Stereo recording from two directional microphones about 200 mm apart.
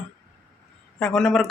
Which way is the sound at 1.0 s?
5° left (ahead or behind).